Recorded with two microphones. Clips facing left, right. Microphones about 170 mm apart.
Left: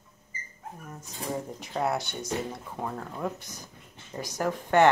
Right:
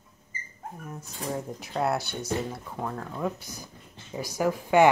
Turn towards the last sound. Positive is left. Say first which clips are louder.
# right 2 dB
turn(degrees=-10)  # may be behind; listen again after turning